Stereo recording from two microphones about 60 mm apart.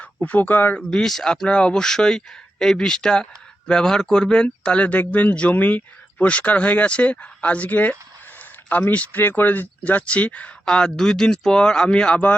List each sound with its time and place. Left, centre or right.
0.0 s speech: left
0.8 s speech: centre
10.7 s speech: centre